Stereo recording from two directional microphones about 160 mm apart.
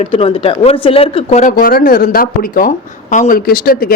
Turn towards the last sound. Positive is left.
turn(degrees=65)  # may be behind; listen again after turning